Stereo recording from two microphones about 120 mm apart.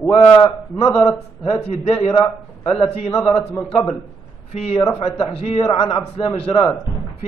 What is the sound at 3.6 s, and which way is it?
Speech, 5° left (ahead or behind).